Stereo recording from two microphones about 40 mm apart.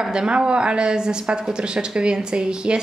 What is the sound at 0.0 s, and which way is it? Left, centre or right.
Speech, right.